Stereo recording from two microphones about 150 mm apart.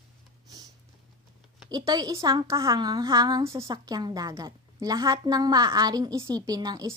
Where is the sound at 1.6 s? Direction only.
25° right (ahead or behind).